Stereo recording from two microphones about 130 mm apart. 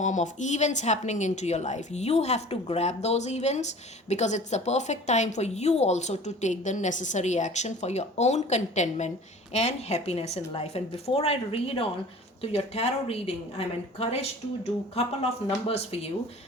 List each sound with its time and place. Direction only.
0.0 s a woman's voice: 70° left (ahead or behind); by 16.0 s 55° left (ahead or behind)